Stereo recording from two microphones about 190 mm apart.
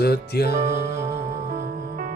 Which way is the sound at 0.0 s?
55° left (ahead or behind).